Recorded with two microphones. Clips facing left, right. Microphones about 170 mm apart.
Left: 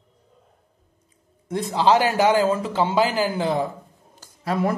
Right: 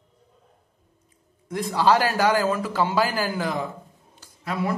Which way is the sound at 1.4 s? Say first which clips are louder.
Left 1 dB; 25° left (ahead or behind).